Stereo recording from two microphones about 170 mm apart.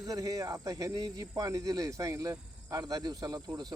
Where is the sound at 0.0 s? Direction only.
20° right (ahead or behind).